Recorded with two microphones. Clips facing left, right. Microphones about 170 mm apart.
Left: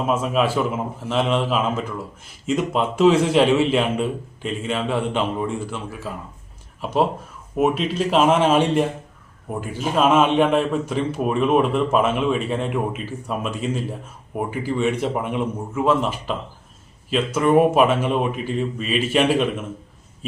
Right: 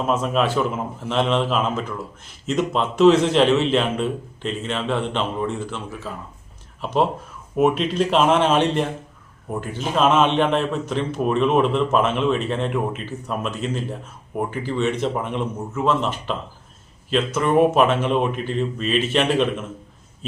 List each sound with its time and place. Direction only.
0.1 s speech: 10° left (ahead or behind)